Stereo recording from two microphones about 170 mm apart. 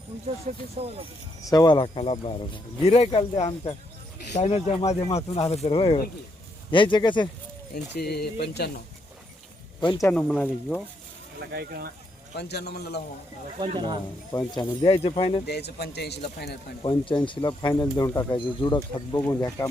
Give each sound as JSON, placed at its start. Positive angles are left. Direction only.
{"t": 0.5, "sound": "speech", "side_deg": -45}
{"t": 1.4, "sound": "speech", "side_deg": 20}
{"t": 7.7, "sound": "speech", "side_deg": 65}
{"t": 10.0, "sound": "speech", "side_deg": 10}
{"t": 11.5, "sound": "speech", "side_deg": -65}
{"t": 12.4, "sound": "speech", "side_deg": 75}
{"t": 14.3, "sound": "speech", "side_deg": 25}
{"t": 15.4, "sound": "speech", "side_deg": 70}
{"t": 16.8, "sound": "speech", "side_deg": 25}